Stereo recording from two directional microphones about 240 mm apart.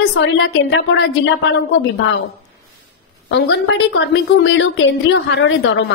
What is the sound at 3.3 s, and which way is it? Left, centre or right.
A woman's voice, left.